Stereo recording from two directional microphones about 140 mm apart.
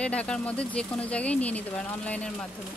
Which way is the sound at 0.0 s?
10° left (ahead or behind).